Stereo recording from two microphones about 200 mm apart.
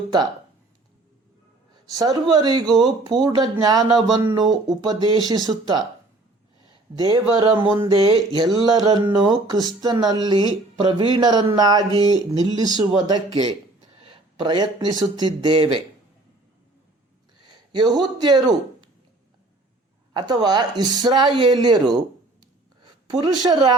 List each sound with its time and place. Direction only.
1.9 s speech: 20° right (ahead or behind)
6.9 s speech: 20° right (ahead or behind)
17.4 s a man's voice: 20° right (ahead or behind)
20.1 s speech: 20° right (ahead or behind)